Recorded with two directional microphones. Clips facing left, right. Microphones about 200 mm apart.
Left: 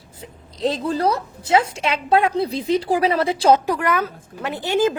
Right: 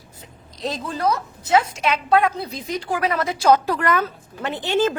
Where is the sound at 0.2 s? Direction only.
30° left (ahead or behind).